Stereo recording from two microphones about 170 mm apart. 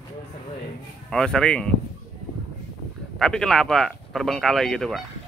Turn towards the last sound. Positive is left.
turn(degrees=0)  # may be behind; listen again after turning